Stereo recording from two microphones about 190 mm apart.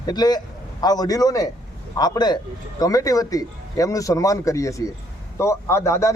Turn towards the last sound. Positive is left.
turn(degrees=15)  # may be behind; listen again after turning